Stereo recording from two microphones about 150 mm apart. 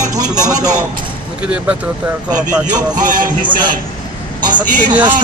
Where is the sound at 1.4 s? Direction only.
10° right (ahead or behind).